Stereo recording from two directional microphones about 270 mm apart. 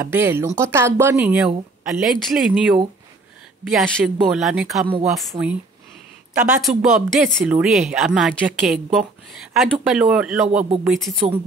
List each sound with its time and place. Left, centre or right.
0.0 s speech: centre
5.3 s speech: centre
6.4 s speech: centre